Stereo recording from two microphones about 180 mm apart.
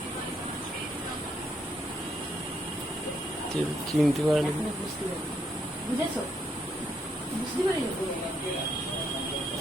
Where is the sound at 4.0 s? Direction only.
Centre (ahead or behind).